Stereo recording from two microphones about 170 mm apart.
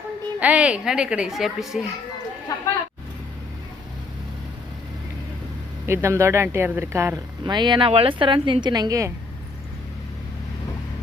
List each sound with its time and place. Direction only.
0.3 s a child's voice: 10° right (ahead or behind)
2.5 s a sound: 20° left (ahead or behind)
5.8 s speech: 15° right (ahead or behind)
7.5 s a woman's voice: 25° right (ahead or behind)